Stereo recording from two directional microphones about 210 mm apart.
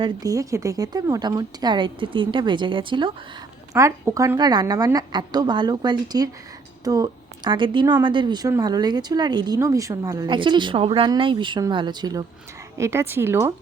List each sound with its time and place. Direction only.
0.0 s a woman's voice: 15° right (ahead or behind)